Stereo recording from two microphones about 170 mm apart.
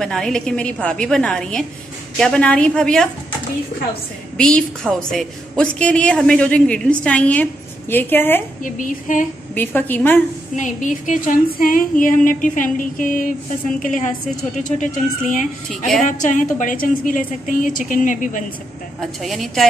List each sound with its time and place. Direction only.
0.0 s a woman's voice: 5° left (ahead or behind)
4.4 s a woman's voice: 5° left (ahead or behind)
8.7 s speech: 50° left (ahead or behind)
9.6 s a woman's voice: 10° left (ahead or behind)
10.5 s speech: 50° left (ahead or behind)
15.7 s a woman's voice: centre (ahead or behind)
16.1 s speech: 45° left (ahead or behind)
18.9 s a woman's voice: centre (ahead or behind)